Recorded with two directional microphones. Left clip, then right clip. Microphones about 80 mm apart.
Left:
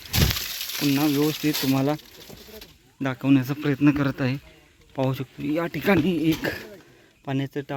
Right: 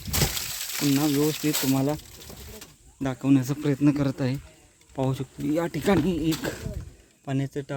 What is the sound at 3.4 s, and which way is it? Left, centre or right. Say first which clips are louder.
Speech: left 1 dB; right.